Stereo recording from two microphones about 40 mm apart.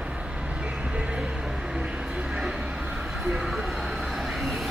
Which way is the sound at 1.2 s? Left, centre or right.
Centre.